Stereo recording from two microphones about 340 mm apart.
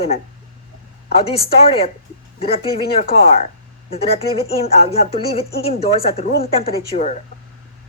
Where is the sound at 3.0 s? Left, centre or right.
Centre.